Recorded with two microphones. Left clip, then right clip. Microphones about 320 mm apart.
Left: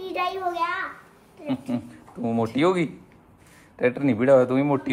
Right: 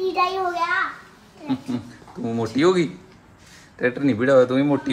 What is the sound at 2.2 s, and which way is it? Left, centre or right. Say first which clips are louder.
A man's voice: right 2 dB; centre.